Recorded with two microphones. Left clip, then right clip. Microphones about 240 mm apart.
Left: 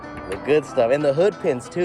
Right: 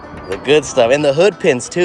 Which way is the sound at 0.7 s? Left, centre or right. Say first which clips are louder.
Right 6 dB; right.